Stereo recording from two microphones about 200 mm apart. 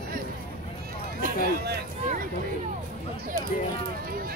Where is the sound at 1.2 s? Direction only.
45° right (ahead or behind).